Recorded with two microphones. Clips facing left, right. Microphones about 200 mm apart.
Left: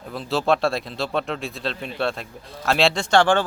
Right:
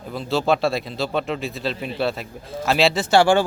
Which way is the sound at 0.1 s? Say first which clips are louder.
Right 1 dB; centre (ahead or behind).